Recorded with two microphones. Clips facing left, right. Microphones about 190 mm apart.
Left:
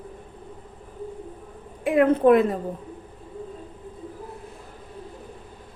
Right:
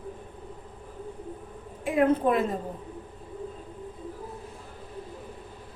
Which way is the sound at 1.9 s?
65° left (ahead or behind).